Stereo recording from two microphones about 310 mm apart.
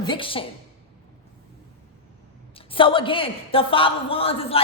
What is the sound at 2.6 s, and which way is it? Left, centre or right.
A woman's voice, centre.